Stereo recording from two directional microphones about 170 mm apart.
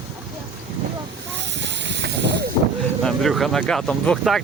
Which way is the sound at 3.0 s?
Centre (ahead or behind).